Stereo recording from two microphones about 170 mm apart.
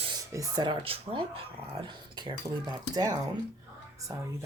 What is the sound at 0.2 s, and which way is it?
Speech, 20° right (ahead or behind).